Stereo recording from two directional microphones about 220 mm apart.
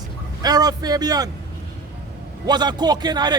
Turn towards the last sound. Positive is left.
turn(degrees=-20)  # may be behind; listen again after turning